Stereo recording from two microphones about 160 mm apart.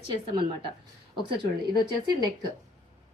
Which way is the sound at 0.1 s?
30° right (ahead or behind).